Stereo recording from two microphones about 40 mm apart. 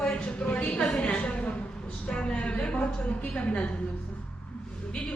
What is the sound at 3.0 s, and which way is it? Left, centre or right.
Speech, left.